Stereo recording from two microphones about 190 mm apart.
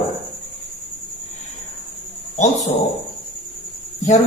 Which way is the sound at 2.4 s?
40° left (ahead or behind).